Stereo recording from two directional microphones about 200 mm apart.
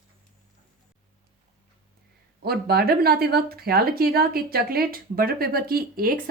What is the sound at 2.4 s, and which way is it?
Speech, 50° right (ahead or behind).